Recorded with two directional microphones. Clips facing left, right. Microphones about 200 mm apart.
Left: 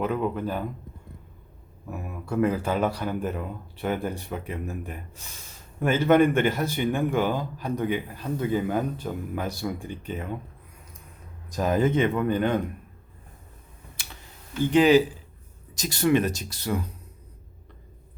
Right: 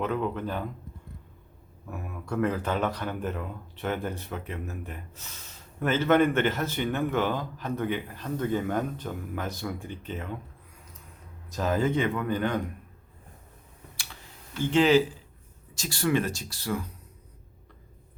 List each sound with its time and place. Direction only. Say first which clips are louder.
0.0 s speech: left 2 dB; 10° left (ahead or behind)
1.9 s speech: left 3 dB; 10° left (ahead or behind)
11.4 s speech: left 3 dB; 15° left (ahead or behind)
14.6 s speech: left 3 dB; 15° left (ahead or behind)